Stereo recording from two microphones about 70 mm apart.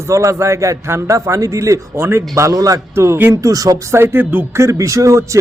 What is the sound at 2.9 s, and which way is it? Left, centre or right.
Speech, right.